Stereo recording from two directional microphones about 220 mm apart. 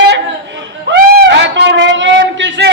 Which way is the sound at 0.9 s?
50° right (ahead or behind).